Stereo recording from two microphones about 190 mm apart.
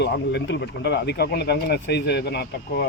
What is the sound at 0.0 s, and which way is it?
Speech, 65° left (ahead or behind).